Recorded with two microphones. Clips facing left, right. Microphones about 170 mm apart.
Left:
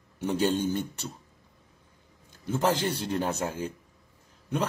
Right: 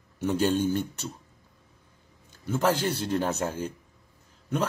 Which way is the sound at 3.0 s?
10° left (ahead or behind).